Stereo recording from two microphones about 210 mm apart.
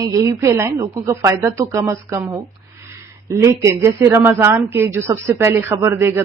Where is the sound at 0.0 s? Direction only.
15° right (ahead or behind).